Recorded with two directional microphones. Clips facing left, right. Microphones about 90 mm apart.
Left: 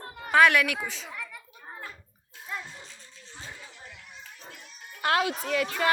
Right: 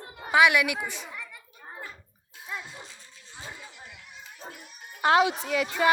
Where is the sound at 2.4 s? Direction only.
5° right (ahead or behind).